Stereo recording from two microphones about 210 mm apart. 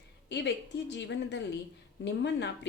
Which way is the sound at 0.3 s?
55° left (ahead or behind).